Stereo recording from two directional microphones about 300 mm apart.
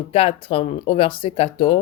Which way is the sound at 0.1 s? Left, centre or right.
Centre.